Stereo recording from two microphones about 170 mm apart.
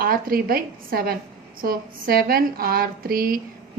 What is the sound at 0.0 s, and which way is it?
Speech, 60° right (ahead or behind).